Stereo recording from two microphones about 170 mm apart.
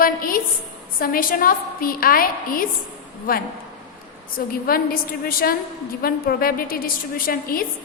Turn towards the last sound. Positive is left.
turn(degrees=60)  # may be behind; listen again after turning